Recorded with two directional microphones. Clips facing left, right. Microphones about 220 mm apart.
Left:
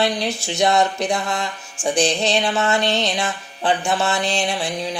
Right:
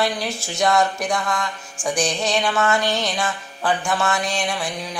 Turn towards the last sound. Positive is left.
turn(degrees=25)  # may be behind; listen again after turning